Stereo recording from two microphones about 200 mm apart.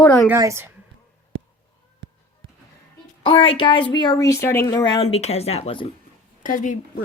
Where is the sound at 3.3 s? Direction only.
25° left (ahead or behind).